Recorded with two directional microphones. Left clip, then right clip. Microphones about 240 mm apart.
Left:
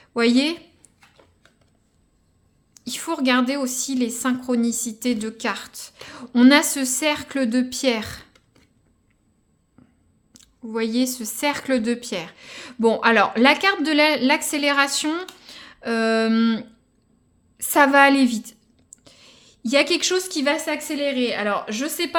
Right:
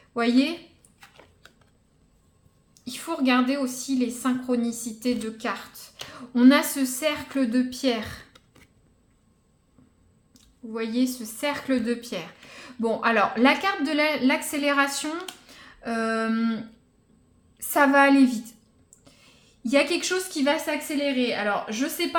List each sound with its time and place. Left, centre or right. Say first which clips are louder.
0.0 s speech: left 4 dB; left
0.9 s a sound: right 2 dB; centre
2.7 s a woman's voice: left 4 dB; left
10.3 s a woman's voice: left 5 dB; left